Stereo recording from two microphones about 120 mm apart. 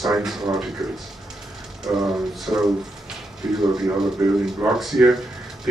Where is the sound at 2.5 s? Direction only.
15° right (ahead or behind).